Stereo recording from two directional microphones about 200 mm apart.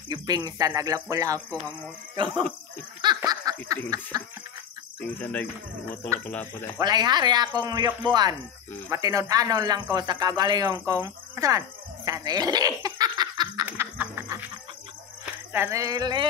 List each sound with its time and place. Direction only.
0.1 s speech: 20° right (ahead or behind)
3.2 s laughter: 20° right (ahead or behind)
3.6 s speech: 15° right (ahead or behind)
5.0 s speech: 10° left (ahead or behind)
6.8 s speech: 20° right (ahead or behind)
13.7 s snicker: 10° right (ahead or behind)
15.5 s speech: 15° right (ahead or behind)